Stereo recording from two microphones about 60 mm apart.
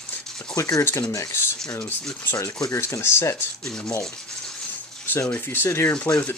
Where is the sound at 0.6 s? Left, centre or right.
Left.